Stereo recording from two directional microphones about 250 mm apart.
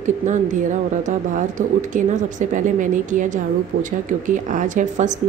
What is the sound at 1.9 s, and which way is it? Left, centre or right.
Speech, right.